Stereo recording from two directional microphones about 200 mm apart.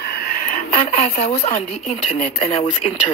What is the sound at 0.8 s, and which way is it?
Speech, 30° left (ahead or behind).